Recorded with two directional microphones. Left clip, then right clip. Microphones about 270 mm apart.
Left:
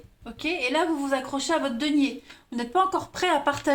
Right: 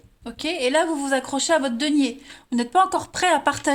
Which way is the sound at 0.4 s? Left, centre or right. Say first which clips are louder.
Right 4 dB; right.